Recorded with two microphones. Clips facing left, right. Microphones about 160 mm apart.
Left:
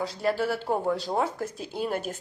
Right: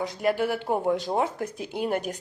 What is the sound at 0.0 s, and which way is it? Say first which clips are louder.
A woman's voice: right 2 dB; 15° right (ahead or behind).